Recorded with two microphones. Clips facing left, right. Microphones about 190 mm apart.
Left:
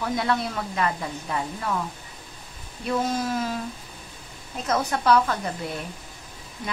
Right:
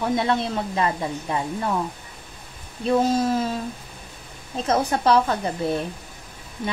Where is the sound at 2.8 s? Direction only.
30° right (ahead or behind).